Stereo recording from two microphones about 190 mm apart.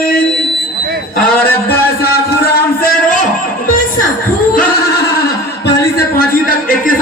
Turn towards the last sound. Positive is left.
turn(degrees=55)  # may be behind; listen again after turning